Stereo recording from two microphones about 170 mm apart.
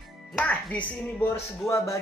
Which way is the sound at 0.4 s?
5° left (ahead or behind).